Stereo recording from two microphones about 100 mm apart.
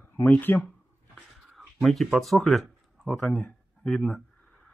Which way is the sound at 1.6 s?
Centre (ahead or behind).